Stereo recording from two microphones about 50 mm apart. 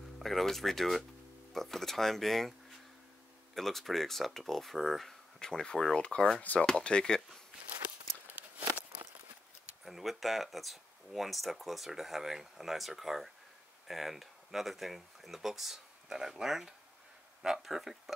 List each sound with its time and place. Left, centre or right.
0.2 s speech: centre
3.5 s speech: centre
5.4 s speech: centre
8.3 s a sound: right
9.8 s speech: centre